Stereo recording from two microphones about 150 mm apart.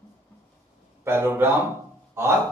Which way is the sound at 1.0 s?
15° right (ahead or behind).